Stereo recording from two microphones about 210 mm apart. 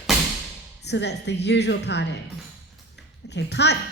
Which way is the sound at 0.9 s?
55° left (ahead or behind).